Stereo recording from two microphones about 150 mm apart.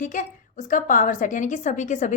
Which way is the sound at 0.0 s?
55° left (ahead or behind).